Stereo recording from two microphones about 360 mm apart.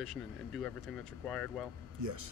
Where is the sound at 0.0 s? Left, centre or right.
Centre.